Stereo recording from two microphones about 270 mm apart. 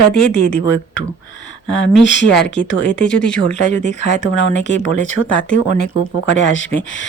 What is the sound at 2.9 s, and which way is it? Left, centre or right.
Speech, centre.